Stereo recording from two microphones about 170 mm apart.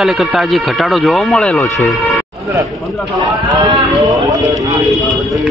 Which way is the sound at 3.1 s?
20° right (ahead or behind).